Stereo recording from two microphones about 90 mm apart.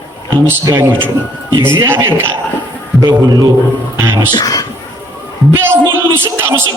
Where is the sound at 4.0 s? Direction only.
25° right (ahead or behind).